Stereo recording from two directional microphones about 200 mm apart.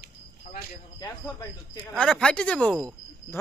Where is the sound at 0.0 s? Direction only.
50° left (ahead or behind).